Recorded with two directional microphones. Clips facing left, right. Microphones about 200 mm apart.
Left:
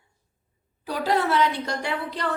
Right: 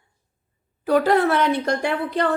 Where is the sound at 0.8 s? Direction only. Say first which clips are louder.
Right 7 dB; 55° right (ahead or behind).